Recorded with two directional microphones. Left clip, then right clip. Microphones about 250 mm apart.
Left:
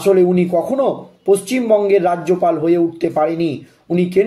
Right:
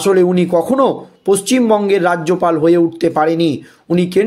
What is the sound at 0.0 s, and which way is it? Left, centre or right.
Speech, right.